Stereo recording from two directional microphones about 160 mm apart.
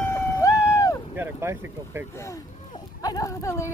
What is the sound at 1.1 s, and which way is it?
Speech, 15° right (ahead or behind).